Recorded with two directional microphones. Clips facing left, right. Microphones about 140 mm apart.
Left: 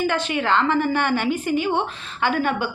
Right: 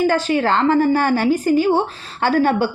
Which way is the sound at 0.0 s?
40° right (ahead or behind).